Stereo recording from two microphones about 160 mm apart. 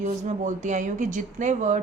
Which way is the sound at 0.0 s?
50° right (ahead or behind).